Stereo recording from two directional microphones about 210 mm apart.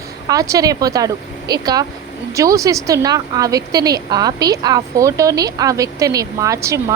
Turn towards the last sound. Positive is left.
turn(degrees=-15)  # may be behind; listen again after turning